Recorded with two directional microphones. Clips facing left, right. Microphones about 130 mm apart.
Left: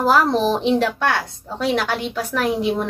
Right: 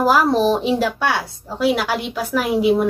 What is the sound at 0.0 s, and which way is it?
A woman's voice, 5° right (ahead or behind).